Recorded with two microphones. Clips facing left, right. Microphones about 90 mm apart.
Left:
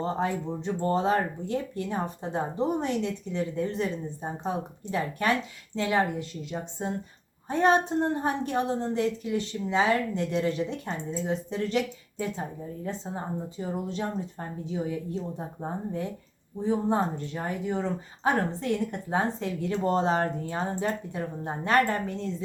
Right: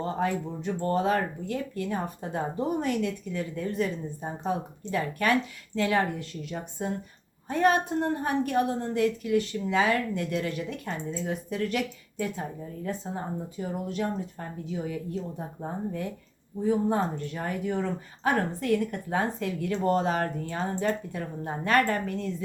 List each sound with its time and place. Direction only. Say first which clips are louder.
0.0 s speech: even; 30° left (ahead or behind)